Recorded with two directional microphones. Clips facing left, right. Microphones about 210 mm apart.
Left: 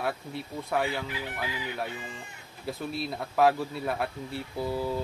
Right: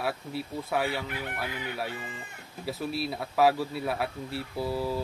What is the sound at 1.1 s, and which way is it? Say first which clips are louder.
Speech: even; 60° right (ahead or behind).